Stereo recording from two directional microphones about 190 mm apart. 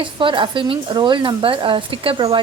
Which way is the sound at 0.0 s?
25° right (ahead or behind).